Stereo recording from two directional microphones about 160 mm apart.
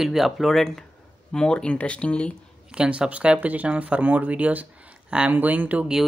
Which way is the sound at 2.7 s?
5° right (ahead or behind).